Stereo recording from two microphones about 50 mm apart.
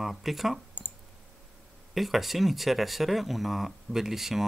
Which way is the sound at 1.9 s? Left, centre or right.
Centre.